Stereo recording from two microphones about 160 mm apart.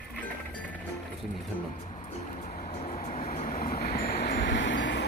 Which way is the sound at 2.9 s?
45° left (ahead or behind).